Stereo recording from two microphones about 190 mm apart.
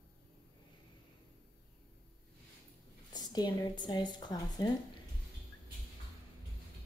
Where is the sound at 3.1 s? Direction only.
20° left (ahead or behind).